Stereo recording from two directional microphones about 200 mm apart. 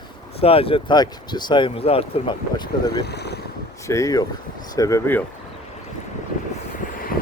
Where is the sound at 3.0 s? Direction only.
55° left (ahead or behind).